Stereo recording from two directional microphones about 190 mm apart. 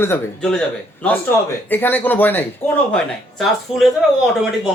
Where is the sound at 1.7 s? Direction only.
10° left (ahead or behind).